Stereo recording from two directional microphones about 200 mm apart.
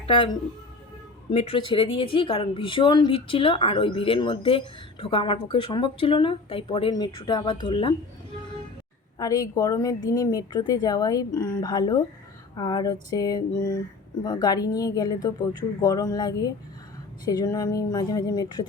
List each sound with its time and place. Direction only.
0.0 s speech: 25° left (ahead or behind)
1.3 s a woman's voice: 30° left (ahead or behind)
9.1 s a woman's voice: 15° left (ahead or behind)